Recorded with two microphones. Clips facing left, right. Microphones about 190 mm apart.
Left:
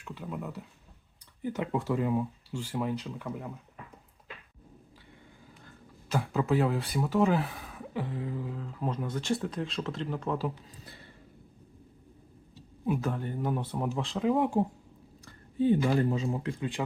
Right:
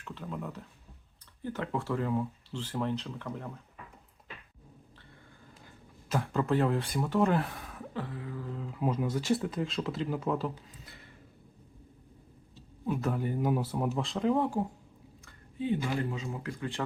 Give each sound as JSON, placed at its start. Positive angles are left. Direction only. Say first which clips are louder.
{"t": 0.0, "sound": "speech", "louder": "left 1 dB", "side_deg": 10}
{"t": 6.1, "sound": "speech", "louder": "left 1 dB", "side_deg": 0}
{"t": 7.9, "sound": "a sound", "louder": "left 4 dB", "side_deg": 20}
{"t": 8.4, "sound": "speech", "louder": "right 2 dB", "side_deg": 0}
{"t": 13.0, "sound": "speech", "louder": "right 2 dB", "side_deg": -5}
{"t": 14.5, "sound": "a sound", "louder": "left 4 dB", "side_deg": 25}
{"t": 15.2, "sound": "speech", "louder": "left 8 dB", "side_deg": 40}